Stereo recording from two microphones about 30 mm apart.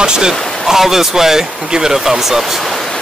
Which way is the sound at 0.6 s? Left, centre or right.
Centre.